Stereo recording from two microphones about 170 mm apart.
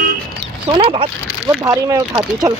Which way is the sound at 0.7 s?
30° right (ahead or behind).